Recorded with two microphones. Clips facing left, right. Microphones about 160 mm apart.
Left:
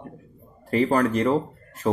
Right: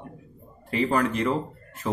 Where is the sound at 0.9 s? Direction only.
35° left (ahead or behind).